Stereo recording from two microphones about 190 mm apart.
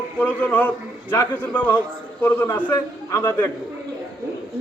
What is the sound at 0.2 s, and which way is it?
A man's voice, 10° left (ahead or behind).